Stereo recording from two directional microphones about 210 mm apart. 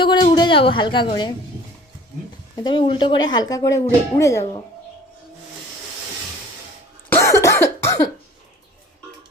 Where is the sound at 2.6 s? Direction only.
25° left (ahead or behind).